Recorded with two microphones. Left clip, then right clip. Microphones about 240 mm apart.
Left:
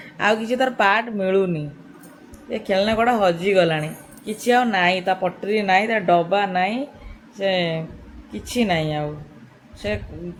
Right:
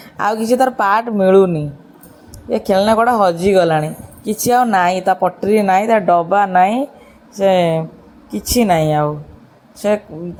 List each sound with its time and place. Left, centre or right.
0.0 s speech: right